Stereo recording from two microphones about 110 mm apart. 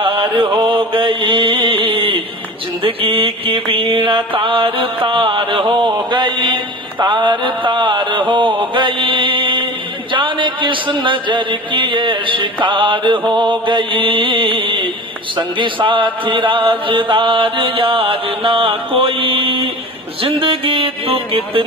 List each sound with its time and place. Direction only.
0.0 s mantra: 50° right (ahead or behind)
10.1 s a man's voice: 50° right (ahead or behind)
20.2 s music: 55° right (ahead or behind)